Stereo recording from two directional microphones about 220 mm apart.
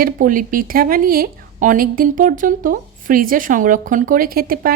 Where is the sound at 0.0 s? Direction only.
40° right (ahead or behind).